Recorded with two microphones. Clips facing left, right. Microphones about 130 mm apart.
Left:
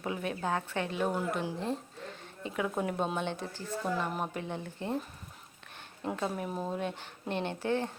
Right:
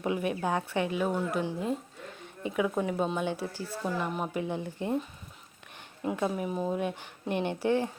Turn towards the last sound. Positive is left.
turn(degrees=-15)  # may be behind; listen again after turning